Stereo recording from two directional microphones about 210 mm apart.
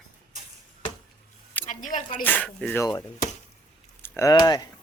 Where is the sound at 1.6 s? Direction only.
35° left (ahead or behind).